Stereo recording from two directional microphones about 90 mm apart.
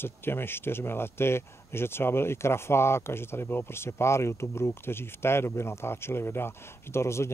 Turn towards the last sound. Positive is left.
turn(degrees=30)  # may be behind; listen again after turning